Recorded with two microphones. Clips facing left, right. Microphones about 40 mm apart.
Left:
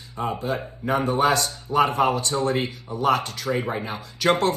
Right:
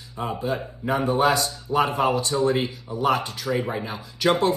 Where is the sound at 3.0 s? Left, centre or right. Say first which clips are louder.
Left 1 dB; right.